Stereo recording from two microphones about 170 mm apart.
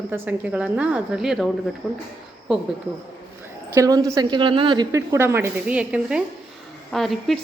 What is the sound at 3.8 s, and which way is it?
A woman's voice, 20° right (ahead or behind).